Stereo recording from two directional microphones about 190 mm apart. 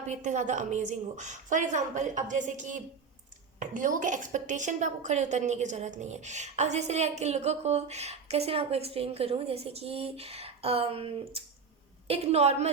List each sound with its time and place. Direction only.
0.1 s a woman's voice: 40° right (ahead or behind)